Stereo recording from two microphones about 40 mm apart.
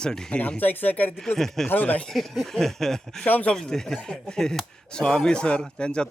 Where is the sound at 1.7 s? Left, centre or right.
Left.